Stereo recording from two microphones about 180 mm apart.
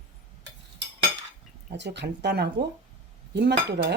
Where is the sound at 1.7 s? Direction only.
75° right (ahead or behind).